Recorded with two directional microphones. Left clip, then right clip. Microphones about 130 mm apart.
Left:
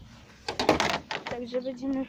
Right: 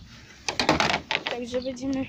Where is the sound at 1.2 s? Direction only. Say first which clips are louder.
Right 4 dB; 15° right (ahead or behind).